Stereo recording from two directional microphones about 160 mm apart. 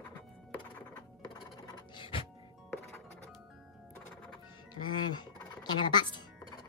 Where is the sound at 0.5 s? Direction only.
10° left (ahead or behind).